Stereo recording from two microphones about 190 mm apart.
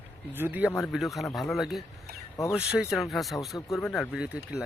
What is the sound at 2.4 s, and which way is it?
Speech, 15° left (ahead or behind).